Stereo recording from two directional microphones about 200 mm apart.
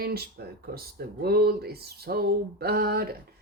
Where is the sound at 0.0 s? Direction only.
50° right (ahead or behind).